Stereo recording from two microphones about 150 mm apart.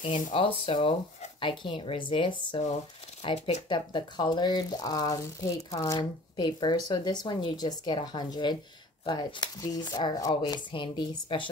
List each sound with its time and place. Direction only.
0.3 s a woman's voice: 40° left (ahead or behind)
3.3 s speech: 45° left (ahead or behind)
3.6 s speech: 30° left (ahead or behind)